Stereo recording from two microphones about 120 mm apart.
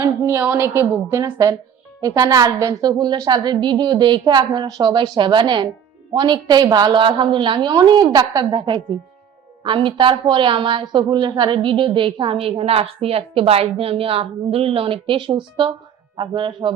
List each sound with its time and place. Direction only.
0.0 s a woman's voice: 25° right (ahead or behind)
1.2 s a woman's voice: 30° right (ahead or behind)